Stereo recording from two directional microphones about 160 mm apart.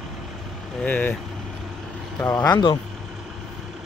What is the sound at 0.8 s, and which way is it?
Speech, 10° left (ahead or behind).